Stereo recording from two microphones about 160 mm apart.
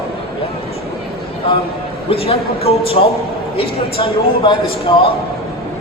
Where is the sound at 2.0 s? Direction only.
35° left (ahead or behind).